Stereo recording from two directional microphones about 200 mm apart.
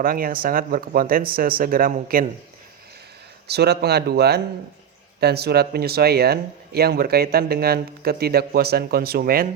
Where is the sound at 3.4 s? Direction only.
55° right (ahead or behind).